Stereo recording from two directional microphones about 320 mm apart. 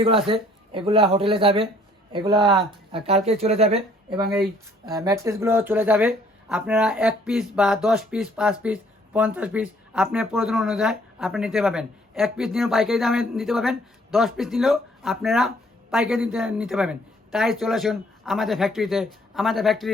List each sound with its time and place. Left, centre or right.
0.0 s speech: centre
2.4 s speech: centre
2.6 s speech: centre
4.9 s speech: centre